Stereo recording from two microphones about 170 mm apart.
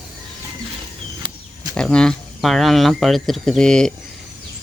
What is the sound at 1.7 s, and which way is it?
Speech, 5° left (ahead or behind).